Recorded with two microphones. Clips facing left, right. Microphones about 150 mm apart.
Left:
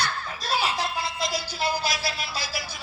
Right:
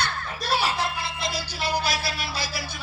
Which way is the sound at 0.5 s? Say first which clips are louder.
Right 1 dB; 30° right (ahead or behind).